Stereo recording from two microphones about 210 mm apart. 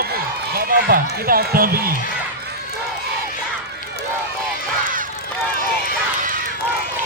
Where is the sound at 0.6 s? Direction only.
45° right (ahead or behind).